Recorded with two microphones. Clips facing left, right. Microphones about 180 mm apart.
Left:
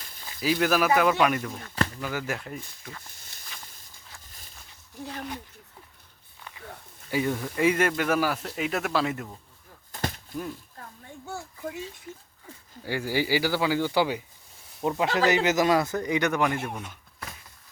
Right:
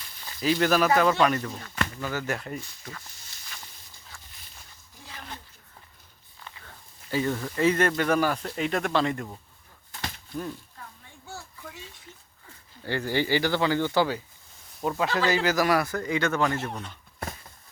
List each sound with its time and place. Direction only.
0.3 s speech: 5° left (ahead or behind)
3.1 s snake: 55° left (ahead or behind)
7.1 s speech: 15° left (ahead or behind)
10.8 s a sound: 45° left (ahead or behind)
12.8 s speech: 10° left (ahead or behind)